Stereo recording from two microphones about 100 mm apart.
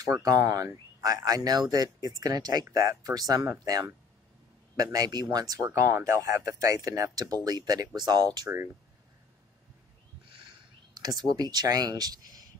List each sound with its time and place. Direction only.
0.0 s speech: 35° right (ahead or behind)
11.0 s speech: 40° right (ahead or behind)